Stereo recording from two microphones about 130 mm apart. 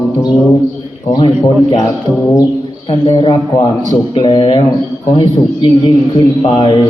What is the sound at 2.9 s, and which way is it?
A man's voice, 40° left (ahead or behind).